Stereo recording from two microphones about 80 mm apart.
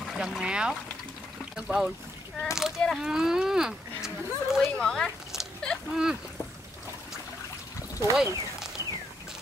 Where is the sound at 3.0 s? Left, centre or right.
Centre.